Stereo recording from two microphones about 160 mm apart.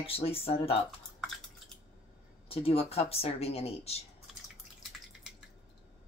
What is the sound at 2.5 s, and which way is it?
Speech, 35° left (ahead or behind).